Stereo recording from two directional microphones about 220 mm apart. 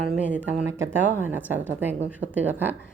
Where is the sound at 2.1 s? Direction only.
5° right (ahead or behind).